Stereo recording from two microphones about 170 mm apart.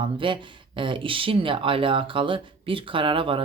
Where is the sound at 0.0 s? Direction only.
30° right (ahead or behind).